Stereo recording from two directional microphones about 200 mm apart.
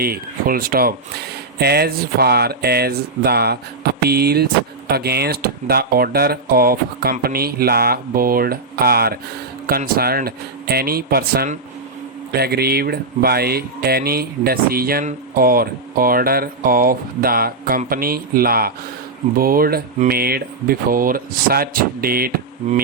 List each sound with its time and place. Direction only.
0.0 s speech: 50° right (ahead or behind)